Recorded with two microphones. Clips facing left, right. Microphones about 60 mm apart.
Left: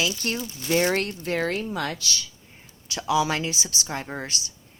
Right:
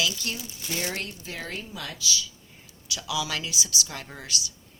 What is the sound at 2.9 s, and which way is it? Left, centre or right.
Speech, left.